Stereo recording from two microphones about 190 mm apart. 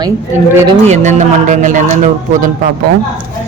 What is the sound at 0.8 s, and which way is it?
Speech, 35° right (ahead or behind).